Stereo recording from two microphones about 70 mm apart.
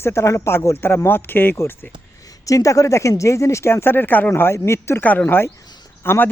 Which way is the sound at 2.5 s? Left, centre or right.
Left.